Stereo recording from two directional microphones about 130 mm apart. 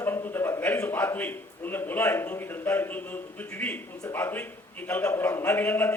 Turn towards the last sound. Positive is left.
turn(degrees=15)  # may be behind; listen again after turning